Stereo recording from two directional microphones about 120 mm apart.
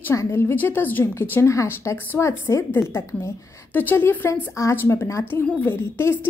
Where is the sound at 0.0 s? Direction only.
25° left (ahead or behind).